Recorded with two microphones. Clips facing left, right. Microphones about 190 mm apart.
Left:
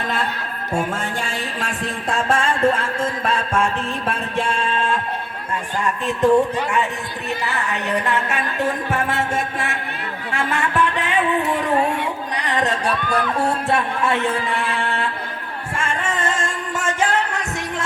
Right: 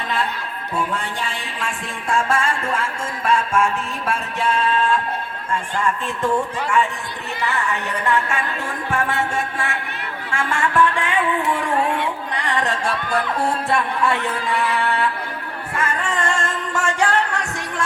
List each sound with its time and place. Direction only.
0.7 s music: 45° left (ahead or behind); by 4.9 s 25° left (ahead or behind)
5.8 s a woman's voice: 20° left (ahead or behind)
10.3 s music: 20° left (ahead or behind)
12.4 s music: 20° left (ahead or behind)
13.7 s a woman's voice: 20° left (ahead or behind)
14.8 s chant: 25° left (ahead or behind)
15.8 s music: 25° left (ahead or behind)